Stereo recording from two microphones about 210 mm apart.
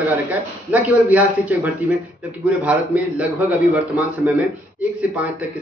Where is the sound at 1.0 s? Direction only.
10° right (ahead or behind).